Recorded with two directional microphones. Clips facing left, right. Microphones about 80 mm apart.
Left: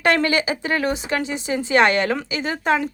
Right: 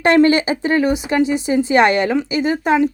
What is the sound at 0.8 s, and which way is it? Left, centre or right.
A woman's voice, centre.